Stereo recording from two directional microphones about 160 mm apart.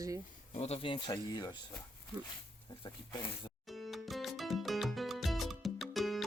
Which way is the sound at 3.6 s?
Centre (ahead or behind).